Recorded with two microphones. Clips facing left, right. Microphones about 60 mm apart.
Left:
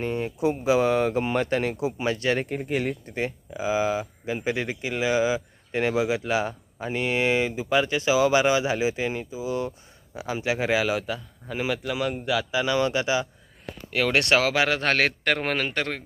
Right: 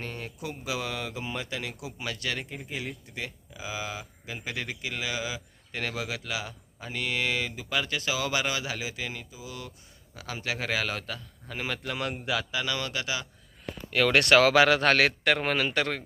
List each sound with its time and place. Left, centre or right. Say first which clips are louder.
0.0 s speech: left 12 dB; left
1.2 s speech: left 10 dB; left
1.7 s speech: left 11 dB; left
2.5 s speech: left 10 dB; left
3.2 s a man's voice: left 9 dB; left; by 12.5 s centre
12.5 s speech: left 8 dB; centre
13.9 s a man's voice: even; centre
14.2 s speech: right 3 dB; left
15.2 s speech: left 1 dB; left